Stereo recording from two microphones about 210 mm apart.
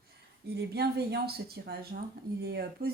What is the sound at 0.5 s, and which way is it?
A woman's voice, 50° right (ahead or behind).